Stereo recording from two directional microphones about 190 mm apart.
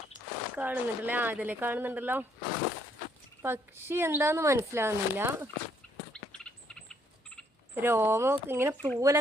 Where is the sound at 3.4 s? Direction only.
10° right (ahead or behind).